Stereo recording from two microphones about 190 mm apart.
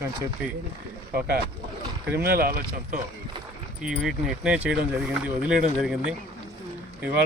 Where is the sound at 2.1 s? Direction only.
55° right (ahead or behind).